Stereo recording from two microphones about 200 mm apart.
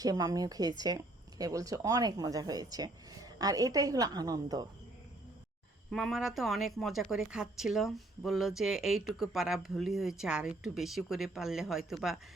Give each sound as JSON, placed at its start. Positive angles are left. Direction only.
{"t": 0.0, "sound": "speech", "side_deg": -20}
{"t": 5.9, "sound": "a woman's voice", "side_deg": 0}